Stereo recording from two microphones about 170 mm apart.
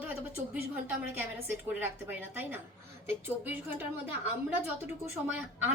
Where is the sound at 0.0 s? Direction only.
10° right (ahead or behind).